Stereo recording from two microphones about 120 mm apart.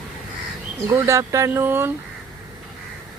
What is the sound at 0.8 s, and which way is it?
Speech, 25° right (ahead or behind).